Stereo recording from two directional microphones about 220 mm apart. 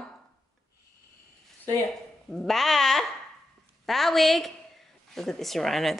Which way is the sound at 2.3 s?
Centre (ahead or behind).